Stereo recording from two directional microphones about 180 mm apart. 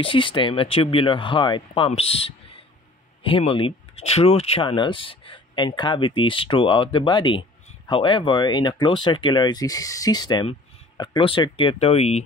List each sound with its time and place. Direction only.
0.0 s speech: 30° left (ahead or behind)